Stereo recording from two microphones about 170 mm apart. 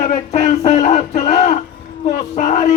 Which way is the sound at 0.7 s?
40° left (ahead or behind).